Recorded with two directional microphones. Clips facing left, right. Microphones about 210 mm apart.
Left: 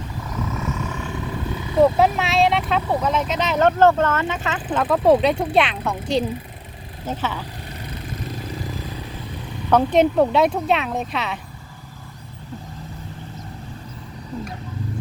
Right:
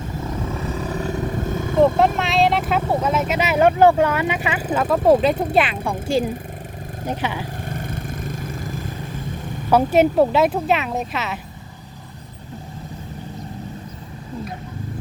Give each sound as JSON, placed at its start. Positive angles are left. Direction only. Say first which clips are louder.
{"t": 0.4, "sound": "vehicle", "louder": "left 1 dB", "side_deg": -35}
{"t": 2.0, "sound": "speech", "louder": "even", "side_deg": 0}
{"t": 4.8, "sound": "speech", "louder": "even", "side_deg": 0}
{"t": 7.7, "sound": "vehicle", "louder": "right 4 dB", "side_deg": -50}
{"t": 9.6, "sound": "speech", "louder": "right 1 dB", "side_deg": -5}